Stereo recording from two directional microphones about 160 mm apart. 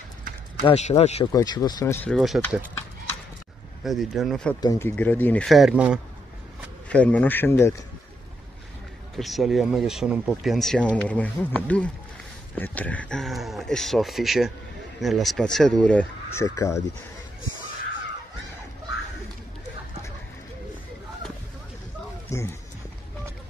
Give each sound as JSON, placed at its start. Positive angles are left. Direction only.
{"t": 0.7, "sound": "speech", "side_deg": 40}
{"t": 1.2, "sound": "speech", "side_deg": 25}
{"t": 2.0, "sound": "speech", "side_deg": 0}
{"t": 3.8, "sound": "speech", "side_deg": 0}
{"t": 4.6, "sound": "speech", "side_deg": 20}
{"t": 6.9, "sound": "speech", "side_deg": 10}
{"t": 9.1, "sound": "speech", "side_deg": 0}
{"t": 16.4, "sound": "speech", "side_deg": 20}
{"t": 22.3, "sound": "a sound", "side_deg": 15}